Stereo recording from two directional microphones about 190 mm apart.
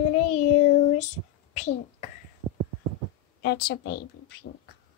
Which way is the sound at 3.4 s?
60° left (ahead or behind).